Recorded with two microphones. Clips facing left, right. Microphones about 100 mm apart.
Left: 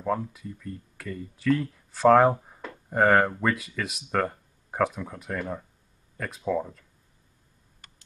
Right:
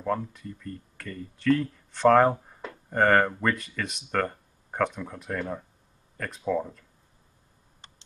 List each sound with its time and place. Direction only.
0.0 s speech: 5° left (ahead or behind)
7.8 s tick: 25° right (ahead or behind)